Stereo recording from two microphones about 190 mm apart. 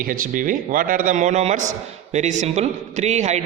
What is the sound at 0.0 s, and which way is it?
A man's voice, 45° right (ahead or behind).